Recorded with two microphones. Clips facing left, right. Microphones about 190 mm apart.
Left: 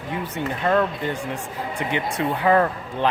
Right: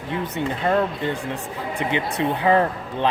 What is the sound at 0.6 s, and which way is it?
Speech, 20° right (ahead or behind).